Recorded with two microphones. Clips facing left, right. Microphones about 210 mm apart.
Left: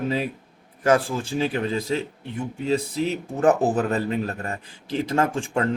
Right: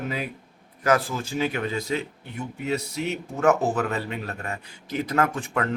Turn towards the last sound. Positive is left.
turn(degrees=30)  # may be behind; listen again after turning